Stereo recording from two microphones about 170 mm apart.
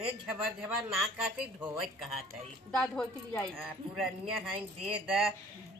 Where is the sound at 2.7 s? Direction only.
5° left (ahead or behind).